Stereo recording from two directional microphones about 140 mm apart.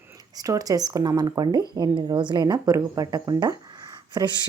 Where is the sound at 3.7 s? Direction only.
25° right (ahead or behind).